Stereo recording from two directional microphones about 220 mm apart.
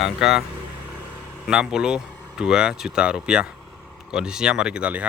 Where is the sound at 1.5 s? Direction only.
5° right (ahead or behind).